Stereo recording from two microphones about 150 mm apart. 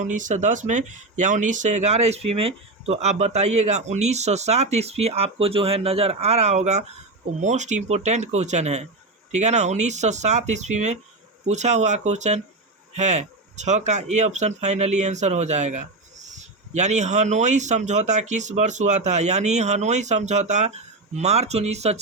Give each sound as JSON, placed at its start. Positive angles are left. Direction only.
{"t": 0.0, "sound": "speech", "side_deg": -55}